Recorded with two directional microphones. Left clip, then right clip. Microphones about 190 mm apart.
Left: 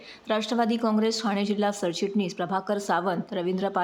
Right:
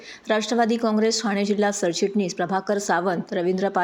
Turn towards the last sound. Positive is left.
turn(degrees=0)  # may be behind; listen again after turning